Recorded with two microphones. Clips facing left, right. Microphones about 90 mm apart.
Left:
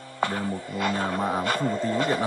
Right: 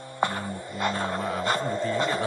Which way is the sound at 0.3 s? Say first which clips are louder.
Left 3 dB; 5° left (ahead or behind).